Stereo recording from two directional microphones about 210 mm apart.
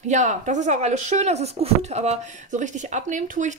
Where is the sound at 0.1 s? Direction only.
35° right (ahead or behind).